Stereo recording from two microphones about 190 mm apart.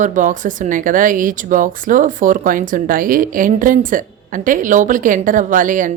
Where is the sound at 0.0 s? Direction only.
40° right (ahead or behind).